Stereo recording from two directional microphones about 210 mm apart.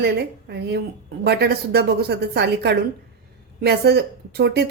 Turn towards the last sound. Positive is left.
turn(degrees=-50)  # may be behind; listen again after turning